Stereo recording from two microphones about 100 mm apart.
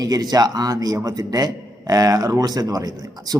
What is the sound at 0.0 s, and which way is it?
Speech, 40° right (ahead or behind).